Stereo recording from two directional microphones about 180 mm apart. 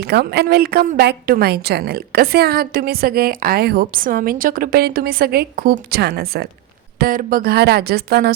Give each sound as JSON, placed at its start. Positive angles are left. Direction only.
{"t": 0.0, "sound": "a woman's voice", "side_deg": -65}